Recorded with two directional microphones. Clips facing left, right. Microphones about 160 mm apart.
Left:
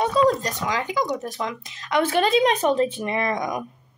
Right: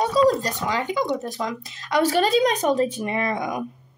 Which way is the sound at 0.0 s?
35° right (ahead or behind).